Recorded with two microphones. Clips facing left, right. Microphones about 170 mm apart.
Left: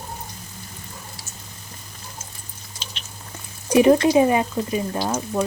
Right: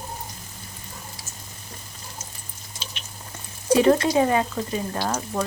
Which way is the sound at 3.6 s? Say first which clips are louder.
Left 3 dB; 15° left (ahead or behind).